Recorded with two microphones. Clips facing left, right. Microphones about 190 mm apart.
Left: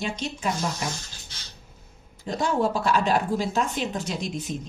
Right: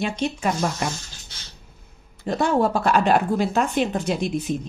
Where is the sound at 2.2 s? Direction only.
60° right (ahead or behind).